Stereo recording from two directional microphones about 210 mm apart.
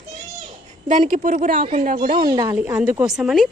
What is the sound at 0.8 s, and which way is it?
Speech, 35° right (ahead or behind).